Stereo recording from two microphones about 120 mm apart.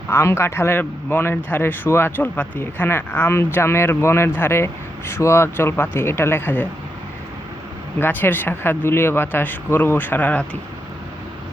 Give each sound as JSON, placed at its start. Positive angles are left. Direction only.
{"t": 0.1, "sound": "speech", "side_deg": 20}
{"t": 7.9, "sound": "speech", "side_deg": 15}